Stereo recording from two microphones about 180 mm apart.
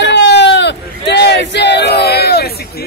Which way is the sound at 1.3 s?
70° left (ahead or behind).